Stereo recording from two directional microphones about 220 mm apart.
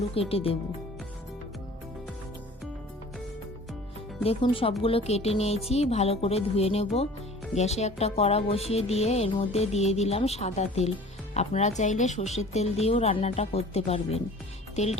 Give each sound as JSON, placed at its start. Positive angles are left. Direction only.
{"t": 0.1, "sound": "speech", "side_deg": 25}
{"t": 4.2, "sound": "speech", "side_deg": 25}